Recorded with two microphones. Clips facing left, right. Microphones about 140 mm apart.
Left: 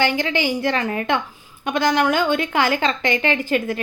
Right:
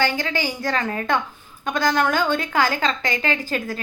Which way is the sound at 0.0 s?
40° right (ahead or behind).